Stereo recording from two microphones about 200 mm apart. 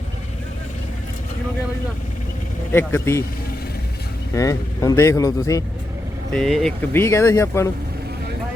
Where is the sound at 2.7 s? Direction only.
10° left (ahead or behind).